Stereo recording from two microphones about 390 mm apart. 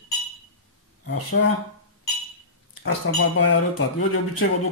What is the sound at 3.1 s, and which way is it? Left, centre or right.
Speech, left.